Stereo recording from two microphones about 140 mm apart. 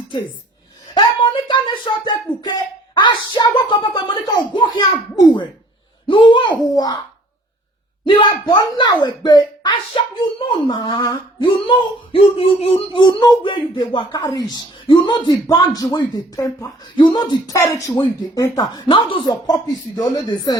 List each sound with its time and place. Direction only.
0.9 s speech: 35° left (ahead or behind)
8.0 s speech: 35° left (ahead or behind)
13.0 s speech: 30° left (ahead or behind)